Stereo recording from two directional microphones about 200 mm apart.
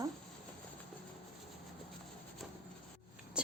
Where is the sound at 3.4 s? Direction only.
5° right (ahead or behind).